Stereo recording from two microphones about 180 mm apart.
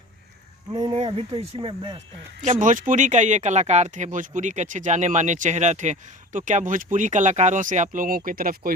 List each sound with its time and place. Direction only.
0.7 s speech: 25° right (ahead or behind)
2.4 s speech: 45° right (ahead or behind)